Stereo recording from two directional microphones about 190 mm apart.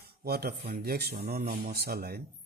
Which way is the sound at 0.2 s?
55° right (ahead or behind).